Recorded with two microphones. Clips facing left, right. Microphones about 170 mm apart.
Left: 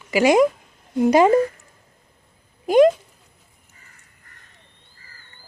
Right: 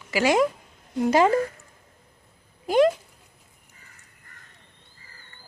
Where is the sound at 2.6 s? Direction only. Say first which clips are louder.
Left 5 dB; 20° left (ahead or behind).